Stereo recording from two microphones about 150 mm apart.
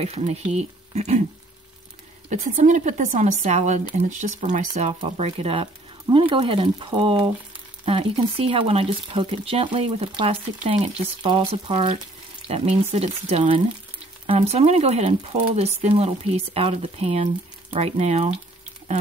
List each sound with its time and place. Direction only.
0.0 s speech: 45° right (ahead or behind)
2.2 s speech: 55° right (ahead or behind)